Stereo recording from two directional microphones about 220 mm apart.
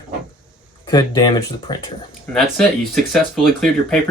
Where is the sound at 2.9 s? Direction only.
Centre (ahead or behind).